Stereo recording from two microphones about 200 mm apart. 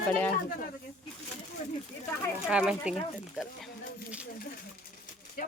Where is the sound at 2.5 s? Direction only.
5° right (ahead or behind).